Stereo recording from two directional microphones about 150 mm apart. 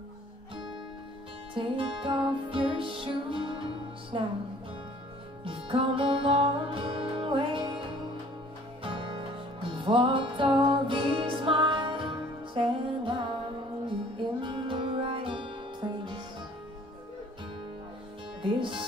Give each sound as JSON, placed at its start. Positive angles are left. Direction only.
{"t": 1.5, "sound": "music", "side_deg": -35}
{"t": 5.4, "sound": "music", "side_deg": -35}
{"t": 8.8, "sound": "music", "side_deg": -35}
{"t": 14.4, "sound": "music", "side_deg": -35}
{"t": 18.4, "sound": "music", "side_deg": -35}